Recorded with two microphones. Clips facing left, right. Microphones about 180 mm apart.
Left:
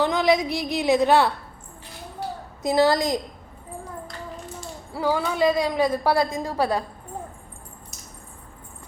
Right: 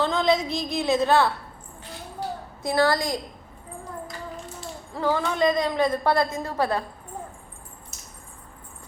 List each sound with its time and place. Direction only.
0.0 s a woman's voice: 15° left (ahead or behind)
2.6 s a woman's voice: 20° left (ahead or behind)
4.9 s a woman's voice: 10° left (ahead or behind)